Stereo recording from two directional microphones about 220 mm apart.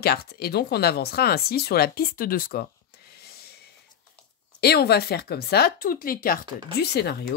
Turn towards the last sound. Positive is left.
turn(degrees=45)  # may be behind; listen again after turning